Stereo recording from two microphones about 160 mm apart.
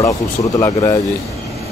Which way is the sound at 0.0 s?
20° left (ahead or behind).